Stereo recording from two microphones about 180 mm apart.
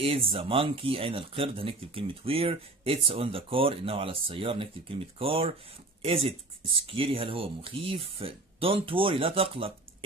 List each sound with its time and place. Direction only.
0.0 s speech: 30° right (ahead or behind)